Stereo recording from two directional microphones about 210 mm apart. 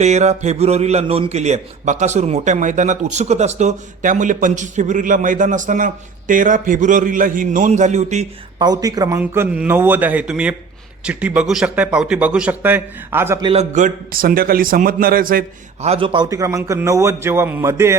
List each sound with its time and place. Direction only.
0.0 s a man's voice: 30° right (ahead or behind)
8.5 s a man's voice: 20° right (ahead or behind)
13.4 s a man's voice: 30° right (ahead or behind)
15.9 s a man's voice: 25° right (ahead or behind)